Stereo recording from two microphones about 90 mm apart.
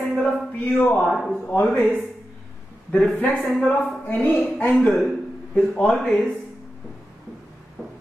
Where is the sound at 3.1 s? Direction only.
20° left (ahead or behind).